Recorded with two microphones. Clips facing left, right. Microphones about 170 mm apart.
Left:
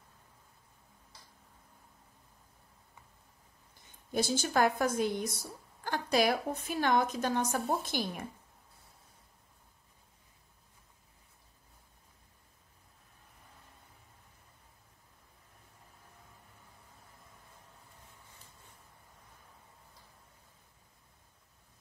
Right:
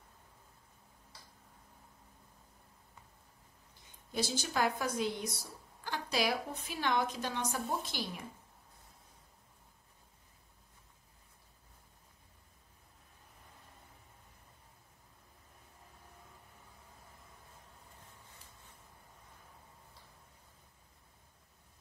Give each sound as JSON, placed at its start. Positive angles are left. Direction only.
{"t": 4.1, "sound": "a woman's voice", "side_deg": 50}